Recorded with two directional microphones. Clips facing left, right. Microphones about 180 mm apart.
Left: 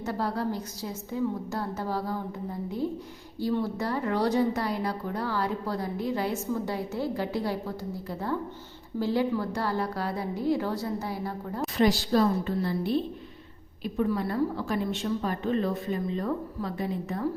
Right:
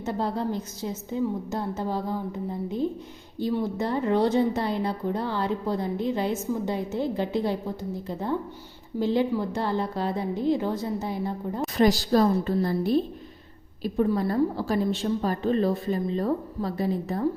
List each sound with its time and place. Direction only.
0.0 s a woman's voice: 20° right (ahead or behind)
11.8 s a woman's voice: 40° right (ahead or behind)